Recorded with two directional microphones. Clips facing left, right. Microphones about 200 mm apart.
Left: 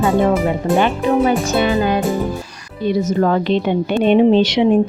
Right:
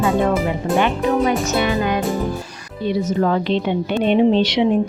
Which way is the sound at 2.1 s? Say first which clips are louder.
Left 2 dB; centre (ahead or behind).